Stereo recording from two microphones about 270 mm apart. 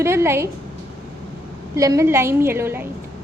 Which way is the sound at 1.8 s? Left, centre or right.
Centre.